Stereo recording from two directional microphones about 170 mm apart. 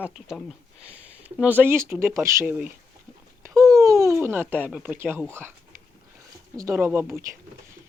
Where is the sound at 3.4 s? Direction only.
15° right (ahead or behind).